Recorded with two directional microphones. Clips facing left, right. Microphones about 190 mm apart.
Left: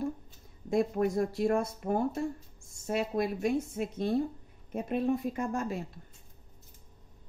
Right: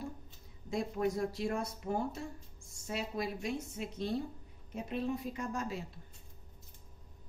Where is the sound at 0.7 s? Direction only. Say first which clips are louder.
Left 6 dB; 55° left (ahead or behind).